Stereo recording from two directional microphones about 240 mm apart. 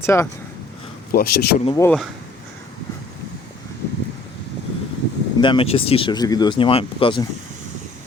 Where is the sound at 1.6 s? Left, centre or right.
Centre.